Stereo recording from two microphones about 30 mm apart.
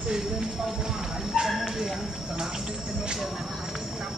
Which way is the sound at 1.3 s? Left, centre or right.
Centre.